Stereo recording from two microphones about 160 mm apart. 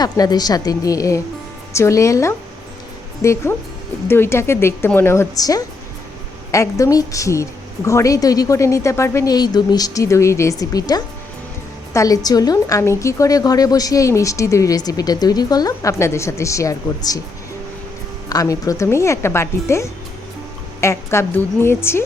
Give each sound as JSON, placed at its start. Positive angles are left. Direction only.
{"t": 0.0, "sound": "a woman's voice", "side_deg": 25}
{"t": 18.3, "sound": "speech", "side_deg": 25}